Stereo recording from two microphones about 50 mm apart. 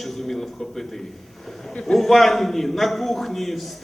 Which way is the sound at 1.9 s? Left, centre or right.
Centre.